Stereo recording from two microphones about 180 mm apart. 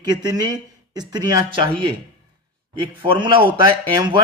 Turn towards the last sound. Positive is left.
turn(degrees=-25)  # may be behind; listen again after turning